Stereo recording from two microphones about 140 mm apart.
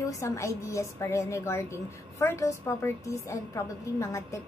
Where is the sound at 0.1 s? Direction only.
20° left (ahead or behind).